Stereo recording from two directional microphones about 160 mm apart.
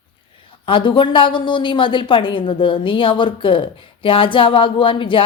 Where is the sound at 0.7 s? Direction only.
30° left (ahead or behind).